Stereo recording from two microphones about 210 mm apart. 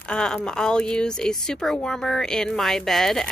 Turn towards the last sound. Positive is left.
turn(degrees=0)  # may be behind; listen again after turning